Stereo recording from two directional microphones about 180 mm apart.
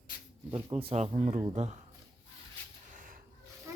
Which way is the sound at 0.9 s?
35° right (ahead or behind).